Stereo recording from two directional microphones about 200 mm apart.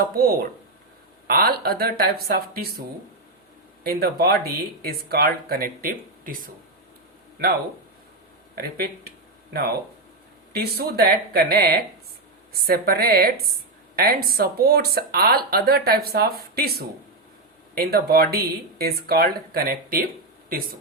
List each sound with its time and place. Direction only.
0.2 s speech: 50° right (ahead or behind)
3.8 s speech: 50° right (ahead or behind)
9.5 s speech: 50° right (ahead or behind)